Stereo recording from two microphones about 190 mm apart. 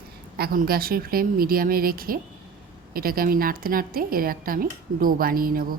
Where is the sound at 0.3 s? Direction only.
50° right (ahead or behind).